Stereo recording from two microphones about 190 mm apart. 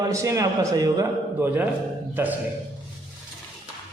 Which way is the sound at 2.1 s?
10° right (ahead or behind).